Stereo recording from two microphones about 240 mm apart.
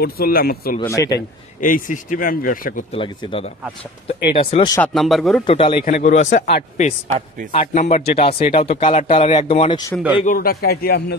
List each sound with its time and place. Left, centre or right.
0.0 s speech: left
0.7 s speech: centre
1.6 s speech: left
3.0 s speech: left
4.7 s speech: centre
5.5 s speech: left
10.2 s speech: left